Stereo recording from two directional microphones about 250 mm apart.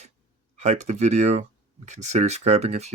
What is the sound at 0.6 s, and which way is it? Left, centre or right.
Speech, right.